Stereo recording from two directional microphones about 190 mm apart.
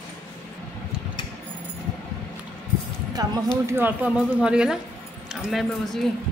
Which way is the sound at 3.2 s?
20° right (ahead or behind).